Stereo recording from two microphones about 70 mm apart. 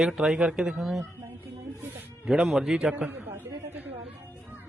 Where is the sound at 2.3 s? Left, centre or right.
Centre.